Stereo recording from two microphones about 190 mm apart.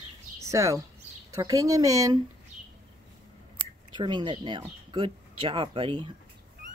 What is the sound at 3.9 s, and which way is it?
Speech, 25° right (ahead or behind).